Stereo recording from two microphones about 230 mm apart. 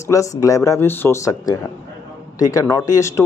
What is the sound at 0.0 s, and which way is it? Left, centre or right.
Speech, centre.